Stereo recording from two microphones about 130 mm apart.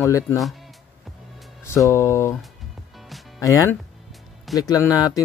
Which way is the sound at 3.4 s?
25° left (ahead or behind).